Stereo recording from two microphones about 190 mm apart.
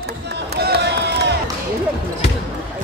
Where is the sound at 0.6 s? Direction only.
60° right (ahead or behind).